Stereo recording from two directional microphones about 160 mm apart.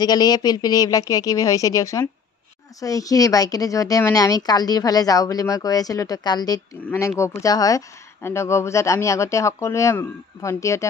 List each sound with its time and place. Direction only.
0.0 s speech: 25° left (ahead or behind)